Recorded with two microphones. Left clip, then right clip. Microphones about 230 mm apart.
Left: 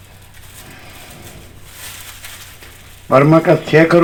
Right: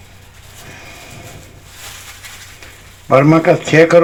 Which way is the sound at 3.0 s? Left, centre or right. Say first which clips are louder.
Even; right.